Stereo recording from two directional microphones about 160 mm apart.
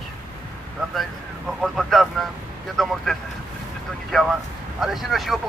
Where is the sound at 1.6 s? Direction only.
Centre (ahead or behind).